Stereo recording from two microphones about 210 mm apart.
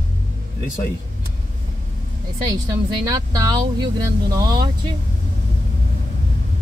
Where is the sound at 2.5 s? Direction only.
15° right (ahead or behind).